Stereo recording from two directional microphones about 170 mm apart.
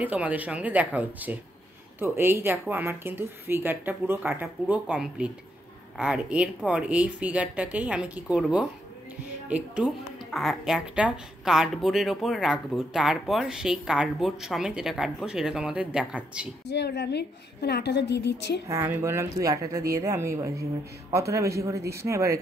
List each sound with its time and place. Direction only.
0.0 s speech: 10° right (ahead or behind)
16.7 s a woman's voice: 80° left
18.7 s a woman's voice: 15° right (ahead or behind)